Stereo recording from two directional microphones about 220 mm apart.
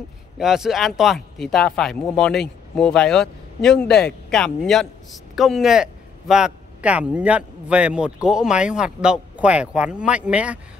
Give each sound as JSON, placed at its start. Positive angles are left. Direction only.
{"t": 0.4, "sound": "speech", "side_deg": 0}